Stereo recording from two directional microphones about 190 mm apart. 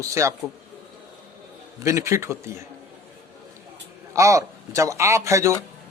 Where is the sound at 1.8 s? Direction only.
15° right (ahead or behind).